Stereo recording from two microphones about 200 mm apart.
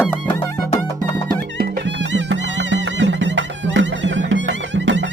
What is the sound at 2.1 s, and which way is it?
Music, 65° right (ahead or behind).